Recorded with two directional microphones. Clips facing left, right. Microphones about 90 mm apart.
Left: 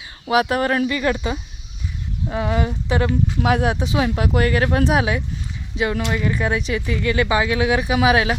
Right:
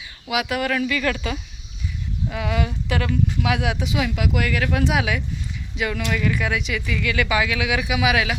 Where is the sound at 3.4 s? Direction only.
40° left (ahead or behind).